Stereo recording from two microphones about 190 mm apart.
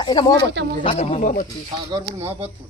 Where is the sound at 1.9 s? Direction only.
15° right (ahead or behind).